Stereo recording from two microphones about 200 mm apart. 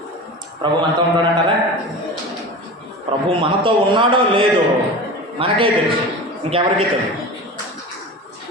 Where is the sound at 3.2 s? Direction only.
25° right (ahead or behind).